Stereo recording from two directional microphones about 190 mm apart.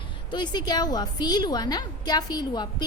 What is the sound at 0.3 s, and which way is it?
A woman's voice, 25° left (ahead or behind).